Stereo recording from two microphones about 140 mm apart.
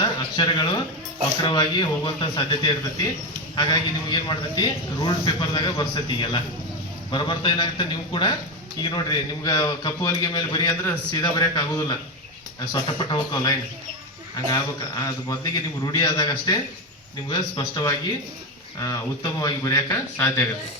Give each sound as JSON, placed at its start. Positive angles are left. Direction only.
{"t": 0.0, "sound": "a sound", "side_deg": 30}
{"t": 1.4, "sound": "a man's voice", "side_deg": 30}
{"t": 20.1, "sound": "speech", "side_deg": 15}